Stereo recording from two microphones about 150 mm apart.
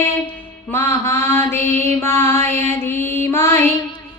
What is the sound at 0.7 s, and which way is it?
Mantra, 15° left (ahead or behind).